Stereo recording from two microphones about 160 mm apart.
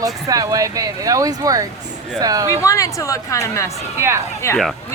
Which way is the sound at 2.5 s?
20° left (ahead or behind).